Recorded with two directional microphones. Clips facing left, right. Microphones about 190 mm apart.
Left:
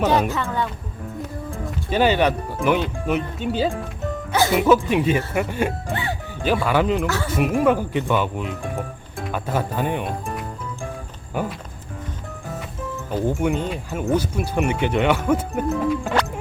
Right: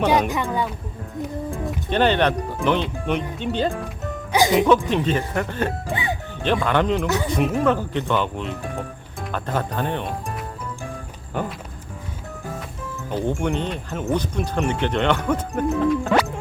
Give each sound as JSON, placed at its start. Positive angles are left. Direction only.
{"t": 0.0, "sound": "speech", "side_deg": -10}
{"t": 1.5, "sound": "speech", "side_deg": 5}
{"t": 4.3, "sound": "music", "side_deg": -15}
{"t": 4.5, "sound": "speech", "side_deg": 5}
{"t": 5.9, "sound": "music", "side_deg": -15}
{"t": 6.4, "sound": "speech", "side_deg": 5}
{"t": 13.1, "sound": "speech", "side_deg": 5}